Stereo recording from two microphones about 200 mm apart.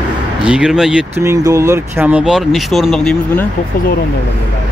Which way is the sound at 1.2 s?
15° right (ahead or behind).